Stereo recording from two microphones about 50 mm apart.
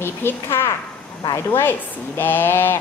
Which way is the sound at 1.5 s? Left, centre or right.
Left.